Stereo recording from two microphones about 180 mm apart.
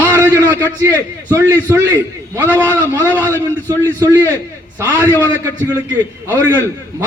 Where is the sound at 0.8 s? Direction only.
15° right (ahead or behind).